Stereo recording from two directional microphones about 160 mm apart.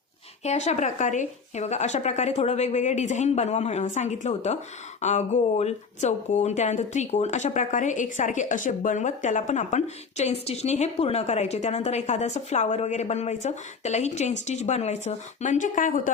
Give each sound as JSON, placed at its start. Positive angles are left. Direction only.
{"t": 0.4, "sound": "a woman's voice", "side_deg": 45}